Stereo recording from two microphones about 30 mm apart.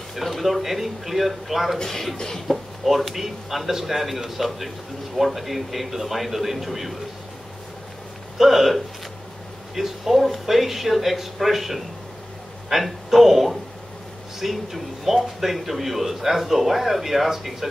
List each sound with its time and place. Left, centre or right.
0.1 s a man's voice: centre
2.1 s cough: centre
2.4 s a man's voice: centre
8.4 s speech: centre
9.8 s a man's voice: centre